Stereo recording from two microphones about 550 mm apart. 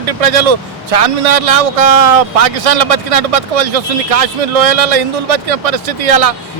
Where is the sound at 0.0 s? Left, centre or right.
Right.